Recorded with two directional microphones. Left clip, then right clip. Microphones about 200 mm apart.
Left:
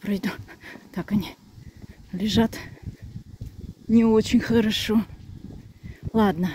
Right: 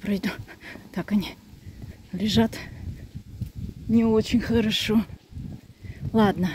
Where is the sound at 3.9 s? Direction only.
30° left (ahead or behind); by 5.1 s 15° left (ahead or behind).